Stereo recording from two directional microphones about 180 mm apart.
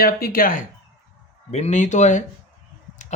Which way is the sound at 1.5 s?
40° left (ahead or behind).